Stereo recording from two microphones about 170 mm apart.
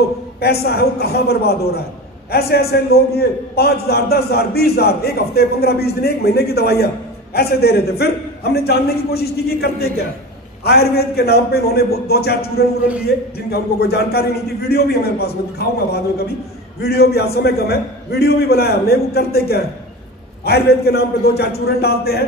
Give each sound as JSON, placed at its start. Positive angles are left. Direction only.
{"t": 0.4, "sound": "a man's voice", "side_deg": 70}
{"t": 16.8, "sound": "a man's voice", "side_deg": 65}